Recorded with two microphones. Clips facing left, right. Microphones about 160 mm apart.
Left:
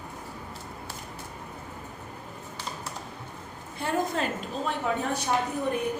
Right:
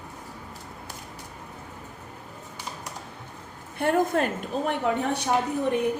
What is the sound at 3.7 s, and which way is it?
A woman's voice, 55° right (ahead or behind).